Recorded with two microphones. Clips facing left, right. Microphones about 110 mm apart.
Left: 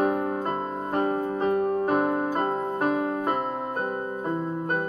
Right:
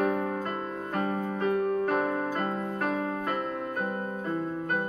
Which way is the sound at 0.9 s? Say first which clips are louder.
Left 5 dB; 35° left (ahead or behind).